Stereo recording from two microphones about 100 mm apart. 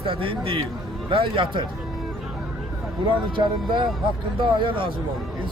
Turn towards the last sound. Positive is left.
turn(degrees=-60)  # may be behind; listen again after turning